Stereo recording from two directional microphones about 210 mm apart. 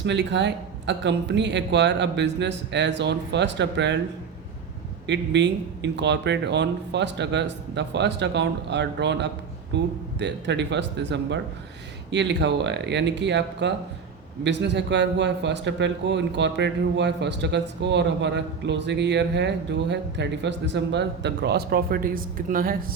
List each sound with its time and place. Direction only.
0.0 s a man's voice: 55° right (ahead or behind)
5.0 s a man's voice: 55° right (ahead or behind)